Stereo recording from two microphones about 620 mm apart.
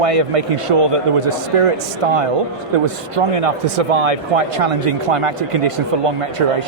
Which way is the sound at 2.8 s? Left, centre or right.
Right.